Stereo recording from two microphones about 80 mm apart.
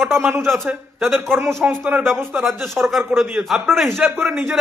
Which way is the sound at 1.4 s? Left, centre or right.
Right.